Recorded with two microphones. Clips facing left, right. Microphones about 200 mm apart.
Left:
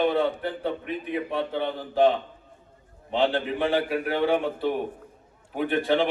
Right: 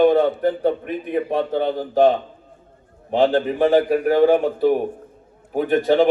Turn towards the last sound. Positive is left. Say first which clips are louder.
# right 7 dB
turn(degrees=-40)  # may be behind; listen again after turning